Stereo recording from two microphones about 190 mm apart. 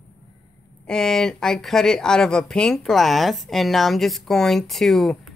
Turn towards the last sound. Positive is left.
turn(degrees=0)  # may be behind; listen again after turning